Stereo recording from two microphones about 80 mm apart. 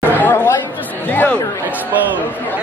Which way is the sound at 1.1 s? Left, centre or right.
Left.